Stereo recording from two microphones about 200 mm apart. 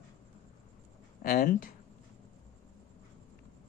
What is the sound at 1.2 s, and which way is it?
Speech, 45° left (ahead or behind).